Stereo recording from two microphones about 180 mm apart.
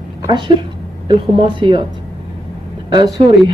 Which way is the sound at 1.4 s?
30° right (ahead or behind).